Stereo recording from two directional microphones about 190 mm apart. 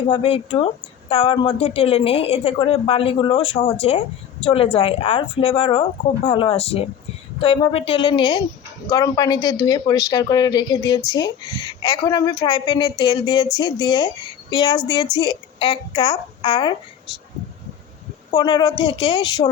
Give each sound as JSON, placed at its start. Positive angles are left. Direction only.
{"t": 0.1, "sound": "a woman's voice", "side_deg": 30}
{"t": 18.3, "sound": "a woman's voice", "side_deg": 20}